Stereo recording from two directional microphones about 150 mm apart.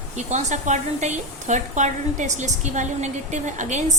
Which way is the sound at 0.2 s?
50° right (ahead or behind).